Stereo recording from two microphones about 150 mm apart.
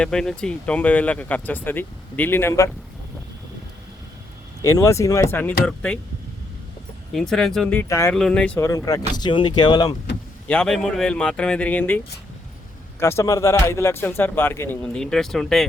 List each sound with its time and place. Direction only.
0.0 s speech: 5° left (ahead or behind)
4.6 s speech: 20° left (ahead or behind)
7.1 s speech: centre (ahead or behind)
7.9 s speech: 20° left (ahead or behind)
8.1 s speech: 5° left (ahead or behind)
8.5 s speech: 20° left (ahead or behind)
10.5 s speech: 5° left (ahead or behind)
13.0 s speech: 20° left (ahead or behind)
14.9 s speech: 5° left (ahead or behind)